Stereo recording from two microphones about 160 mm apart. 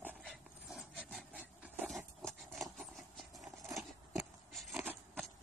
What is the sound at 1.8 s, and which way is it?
Horse, centre (ahead or behind).